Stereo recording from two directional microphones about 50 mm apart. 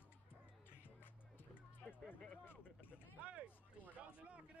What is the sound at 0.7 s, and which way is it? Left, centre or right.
Music, left.